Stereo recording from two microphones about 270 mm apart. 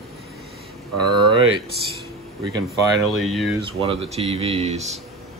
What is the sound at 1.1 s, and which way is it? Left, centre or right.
Speech, centre.